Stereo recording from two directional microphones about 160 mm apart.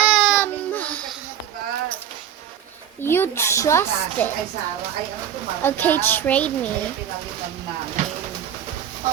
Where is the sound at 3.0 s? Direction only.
15° left (ahead or behind).